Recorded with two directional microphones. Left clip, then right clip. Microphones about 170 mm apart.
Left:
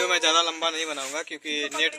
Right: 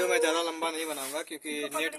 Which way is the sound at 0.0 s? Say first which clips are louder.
Left 5 dB; centre (ahead or behind).